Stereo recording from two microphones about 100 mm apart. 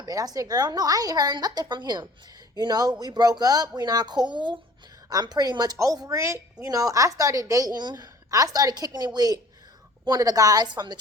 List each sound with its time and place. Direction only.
0.0 s a woman's voice: 40° right (ahead or behind)
5.0 s a woman's voice: 40° right (ahead or behind)